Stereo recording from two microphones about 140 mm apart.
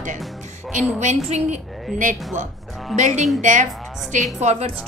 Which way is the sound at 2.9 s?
55° right (ahead or behind).